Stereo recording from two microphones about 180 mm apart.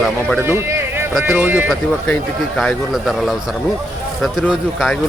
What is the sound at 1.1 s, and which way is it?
A man's voice, 5° right (ahead or behind).